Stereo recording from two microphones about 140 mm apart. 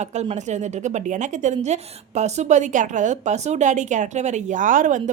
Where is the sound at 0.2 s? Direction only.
55° right (ahead or behind).